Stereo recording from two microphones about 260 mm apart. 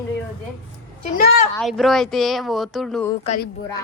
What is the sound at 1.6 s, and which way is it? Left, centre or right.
Speech, centre.